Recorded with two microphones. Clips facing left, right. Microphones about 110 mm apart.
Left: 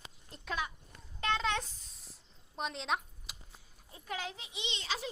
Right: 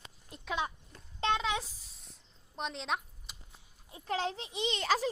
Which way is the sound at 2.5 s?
Centre (ahead or behind).